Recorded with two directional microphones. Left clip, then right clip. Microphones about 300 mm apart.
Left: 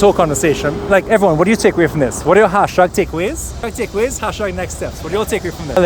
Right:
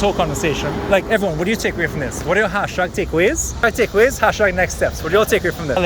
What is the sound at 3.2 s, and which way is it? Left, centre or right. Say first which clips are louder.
Speech: right 5 dB; centre.